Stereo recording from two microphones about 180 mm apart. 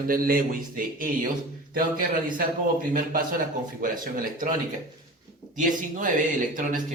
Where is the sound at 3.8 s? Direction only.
50° right (ahead or behind).